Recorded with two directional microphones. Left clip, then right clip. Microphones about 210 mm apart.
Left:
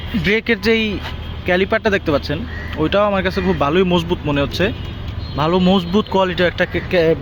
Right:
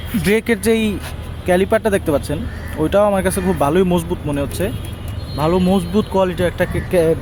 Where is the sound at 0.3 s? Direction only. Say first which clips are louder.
Even; 20° right (ahead or behind).